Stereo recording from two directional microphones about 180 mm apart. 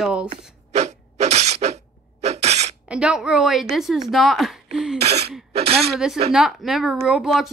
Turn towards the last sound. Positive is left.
turn(degrees=0)  # may be behind; listen again after turning